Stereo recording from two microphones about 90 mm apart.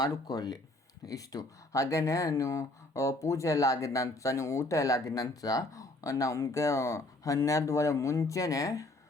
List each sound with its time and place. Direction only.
0.0 s speech: 45° left (ahead or behind)